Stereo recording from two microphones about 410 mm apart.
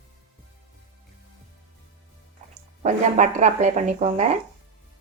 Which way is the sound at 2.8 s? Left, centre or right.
Centre.